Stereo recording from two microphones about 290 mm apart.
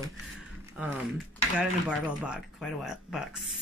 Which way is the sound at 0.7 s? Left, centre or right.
Centre.